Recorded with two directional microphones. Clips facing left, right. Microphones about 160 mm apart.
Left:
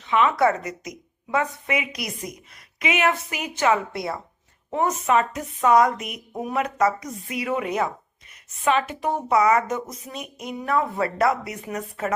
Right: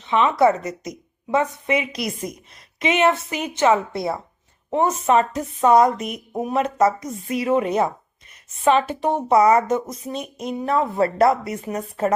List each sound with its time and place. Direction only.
0.0 s a woman's voice: 25° right (ahead or behind)